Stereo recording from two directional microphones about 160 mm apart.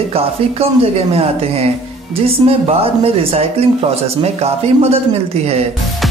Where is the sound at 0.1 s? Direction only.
35° right (ahead or behind).